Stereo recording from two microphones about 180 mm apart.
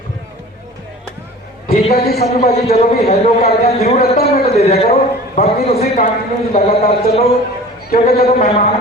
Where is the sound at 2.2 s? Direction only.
35° left (ahead or behind).